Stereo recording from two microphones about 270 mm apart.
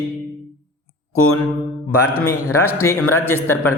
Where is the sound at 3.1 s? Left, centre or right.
Centre.